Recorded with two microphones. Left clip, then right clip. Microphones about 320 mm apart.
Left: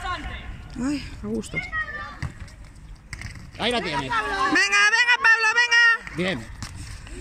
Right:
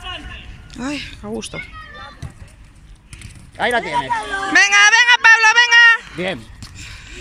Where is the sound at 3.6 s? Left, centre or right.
Right.